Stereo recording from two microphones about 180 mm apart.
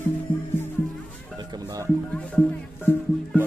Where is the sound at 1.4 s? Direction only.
20° right (ahead or behind).